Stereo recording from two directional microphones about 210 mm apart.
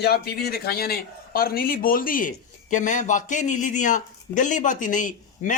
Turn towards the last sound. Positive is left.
turn(degrees=40)  # may be behind; listen again after turning